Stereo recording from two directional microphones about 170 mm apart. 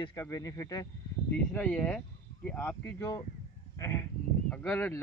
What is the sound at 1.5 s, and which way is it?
Speech, 10° left (ahead or behind).